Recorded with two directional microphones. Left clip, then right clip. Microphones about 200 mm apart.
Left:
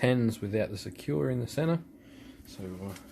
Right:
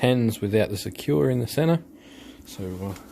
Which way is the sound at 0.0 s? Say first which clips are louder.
Right 6 dB; 20° right (ahead or behind).